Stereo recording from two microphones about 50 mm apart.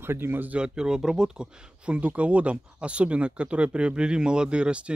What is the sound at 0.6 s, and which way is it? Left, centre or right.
Speech, centre.